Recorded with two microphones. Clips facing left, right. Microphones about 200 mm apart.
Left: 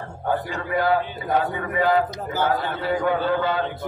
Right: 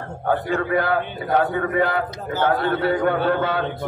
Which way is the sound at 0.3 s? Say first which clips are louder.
Right 4 dB; 60° right (ahead or behind).